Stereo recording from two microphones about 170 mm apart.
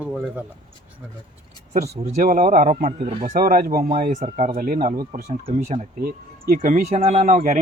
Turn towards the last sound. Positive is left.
turn(degrees=-45)  # may be behind; listen again after turning